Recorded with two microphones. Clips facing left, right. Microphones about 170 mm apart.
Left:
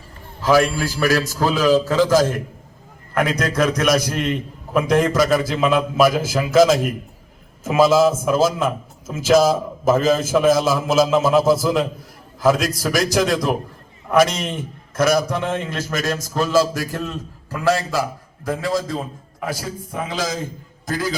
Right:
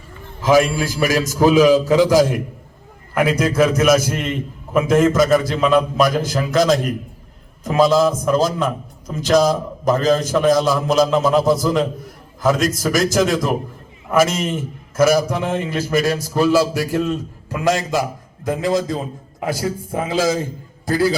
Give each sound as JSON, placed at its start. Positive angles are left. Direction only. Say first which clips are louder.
{"t": 0.4, "sound": "a man's voice", "louder": "right 2 dB", "side_deg": -20}
{"t": 18.6, "sound": "a man's voice", "louder": "right 4 dB", "side_deg": -20}
{"t": 19.9, "sound": "a man's voice", "louder": "right 6 dB", "side_deg": -25}